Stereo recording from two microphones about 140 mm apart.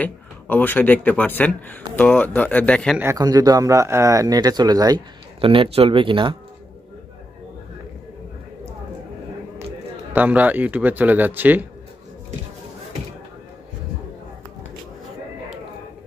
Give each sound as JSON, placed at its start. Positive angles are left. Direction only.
{"t": 0.0, "sound": "speech", "side_deg": 10}
{"t": 3.0, "sound": "speech", "side_deg": -25}
{"t": 5.4, "sound": "speech", "side_deg": -40}
{"t": 10.1, "sound": "speech", "side_deg": -10}